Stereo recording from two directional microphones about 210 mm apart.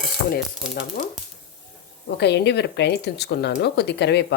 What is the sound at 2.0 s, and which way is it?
Speech, 55° left (ahead or behind).